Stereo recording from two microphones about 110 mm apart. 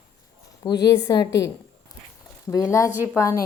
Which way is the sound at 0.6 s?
35° left (ahead or behind).